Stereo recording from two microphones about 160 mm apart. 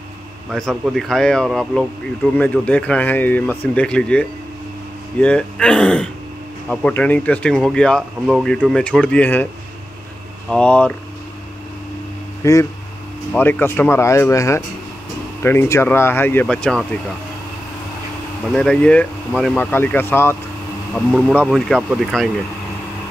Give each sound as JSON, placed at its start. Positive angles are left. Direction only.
{"t": 0.5, "sound": "speech", "side_deg": 0}
{"t": 10.5, "sound": "speech", "side_deg": 5}
{"t": 12.4, "sound": "speech", "side_deg": 20}
{"t": 18.5, "sound": "speech", "side_deg": 5}
{"t": 20.9, "sound": "speech", "side_deg": 0}